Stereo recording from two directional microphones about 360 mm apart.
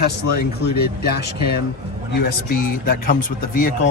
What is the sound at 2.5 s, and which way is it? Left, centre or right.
Speech, left.